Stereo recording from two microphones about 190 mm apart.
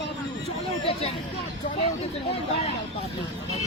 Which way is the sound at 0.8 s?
30° left (ahead or behind).